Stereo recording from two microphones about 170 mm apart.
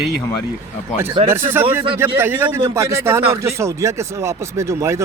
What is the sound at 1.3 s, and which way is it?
Speech, 10° right (ahead or behind).